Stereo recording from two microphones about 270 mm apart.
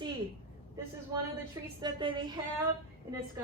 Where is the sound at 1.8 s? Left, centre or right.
Centre.